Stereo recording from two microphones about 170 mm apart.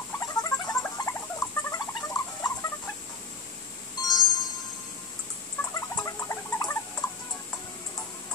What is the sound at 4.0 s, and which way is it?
Music, 25° left (ahead or behind).